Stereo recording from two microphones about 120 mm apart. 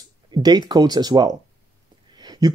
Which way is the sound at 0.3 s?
35° right (ahead or behind).